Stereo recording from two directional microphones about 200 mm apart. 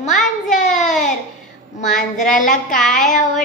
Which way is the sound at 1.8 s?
40° left (ahead or behind).